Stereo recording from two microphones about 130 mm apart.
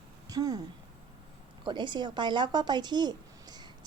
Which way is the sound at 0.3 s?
30° right (ahead or behind).